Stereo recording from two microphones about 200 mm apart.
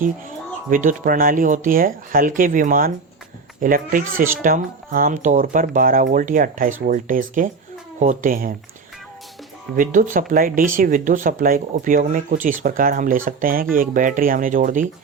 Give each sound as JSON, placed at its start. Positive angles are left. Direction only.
{"t": 0.7, "sound": "speech", "side_deg": -40}
{"t": 9.7, "sound": "speech", "side_deg": -40}